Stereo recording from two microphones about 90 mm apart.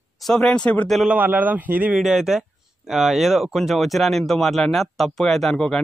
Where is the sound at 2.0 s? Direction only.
5° right (ahead or behind).